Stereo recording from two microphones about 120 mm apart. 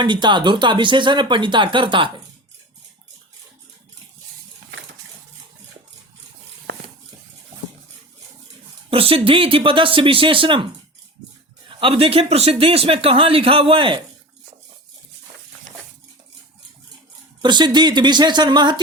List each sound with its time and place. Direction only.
0.0 s speech: 40° right (ahead or behind)
8.9 s speech: 50° right (ahead or behind)
11.7 s speech: 45° right (ahead or behind)
17.4 s speech: 40° right (ahead or behind)